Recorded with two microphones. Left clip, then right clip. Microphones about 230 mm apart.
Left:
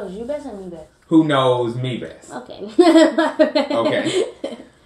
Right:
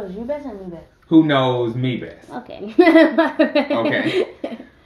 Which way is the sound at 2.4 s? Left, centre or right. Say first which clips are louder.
Even; right.